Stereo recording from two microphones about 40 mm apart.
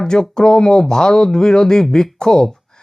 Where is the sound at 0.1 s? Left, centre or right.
Centre.